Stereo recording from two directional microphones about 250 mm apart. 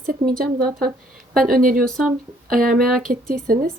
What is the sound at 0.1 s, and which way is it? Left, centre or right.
Speech, right.